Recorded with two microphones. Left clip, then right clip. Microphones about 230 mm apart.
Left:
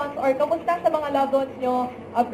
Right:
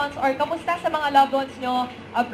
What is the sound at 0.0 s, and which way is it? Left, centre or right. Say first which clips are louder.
A woman's voice: even; right.